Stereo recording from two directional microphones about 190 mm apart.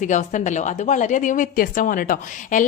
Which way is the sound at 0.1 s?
40° left (ahead or behind).